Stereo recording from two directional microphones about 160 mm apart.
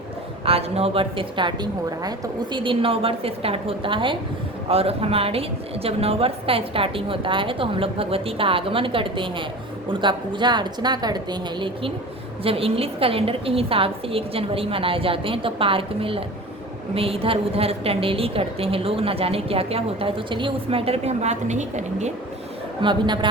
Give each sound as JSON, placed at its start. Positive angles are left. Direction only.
{"t": 0.4, "sound": "a woman's voice", "side_deg": -40}
{"t": 22.8, "sound": "a woman's voice", "side_deg": -30}